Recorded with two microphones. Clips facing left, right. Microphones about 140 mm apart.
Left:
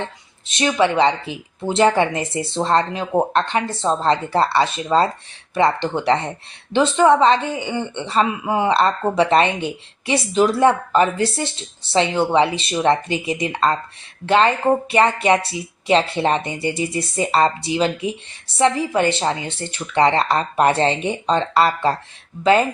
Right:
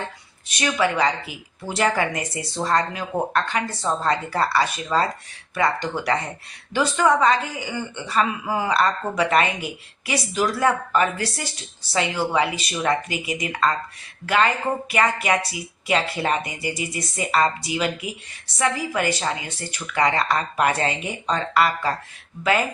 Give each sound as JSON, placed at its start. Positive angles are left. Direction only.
{"t": 0.0, "sound": "speech", "side_deg": 25}